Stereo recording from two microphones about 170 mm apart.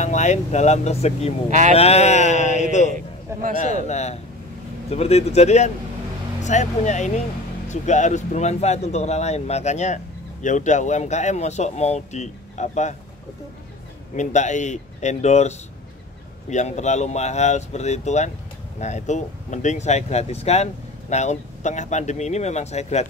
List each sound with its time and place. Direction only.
0.0 s speech: 45° left (ahead or behind)
1.5 s speech: 45° right (ahead or behind)
1.8 s a sound: 40° left (ahead or behind)
2.9 s a sound: 50° right (ahead or behind)
3.8 s speech: 40° left (ahead or behind)
14.1 s speech: 45° left (ahead or behind)